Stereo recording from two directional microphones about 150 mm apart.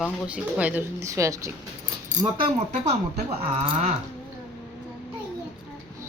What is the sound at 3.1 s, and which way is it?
Speech, 40° right (ahead or behind).